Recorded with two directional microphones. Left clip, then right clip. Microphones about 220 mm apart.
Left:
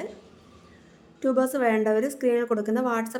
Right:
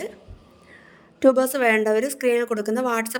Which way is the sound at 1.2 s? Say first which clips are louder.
Right 6 dB; 45° right (ahead or behind).